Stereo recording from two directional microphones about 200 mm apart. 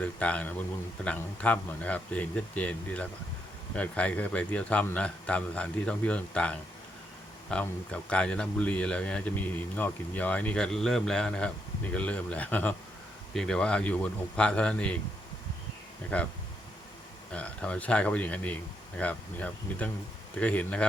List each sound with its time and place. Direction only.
0.0 s a man's voice: 5° left (ahead or behind)
16.1 s a man's voice: 5° left (ahead or behind)
17.3 s a man's voice: 5° left (ahead or behind)